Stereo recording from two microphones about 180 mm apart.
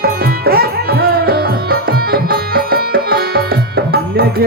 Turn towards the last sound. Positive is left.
turn(degrees=-60)  # may be behind; listen again after turning